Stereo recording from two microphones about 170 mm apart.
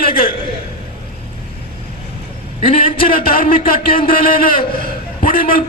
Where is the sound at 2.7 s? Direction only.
30° left (ahead or behind).